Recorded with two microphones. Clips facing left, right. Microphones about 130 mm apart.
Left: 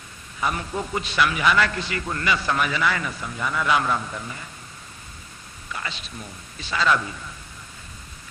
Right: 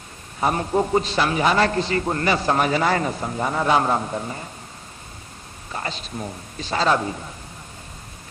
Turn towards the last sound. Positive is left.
turn(degrees=-40)  # may be behind; listen again after turning